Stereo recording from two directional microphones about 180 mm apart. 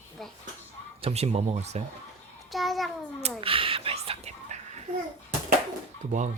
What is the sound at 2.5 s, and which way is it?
Child singing, centre (ahead or behind).